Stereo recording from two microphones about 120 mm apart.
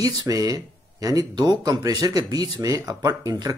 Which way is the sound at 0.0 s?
30° right (ahead or behind).